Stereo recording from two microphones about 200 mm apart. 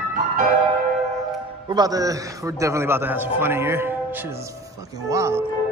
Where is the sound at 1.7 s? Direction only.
20° right (ahead or behind).